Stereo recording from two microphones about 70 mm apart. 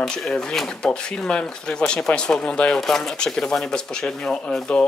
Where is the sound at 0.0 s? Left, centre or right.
Centre.